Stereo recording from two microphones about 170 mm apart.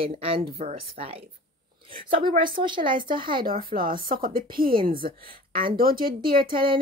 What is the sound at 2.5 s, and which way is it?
Speech, 30° right (ahead or behind).